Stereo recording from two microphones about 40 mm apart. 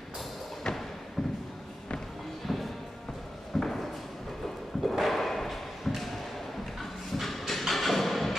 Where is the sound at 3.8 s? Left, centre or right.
Centre.